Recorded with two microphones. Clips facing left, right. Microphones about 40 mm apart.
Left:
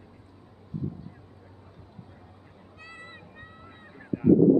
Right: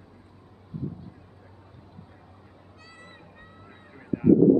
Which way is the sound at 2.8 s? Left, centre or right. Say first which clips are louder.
Left 4 dB; left.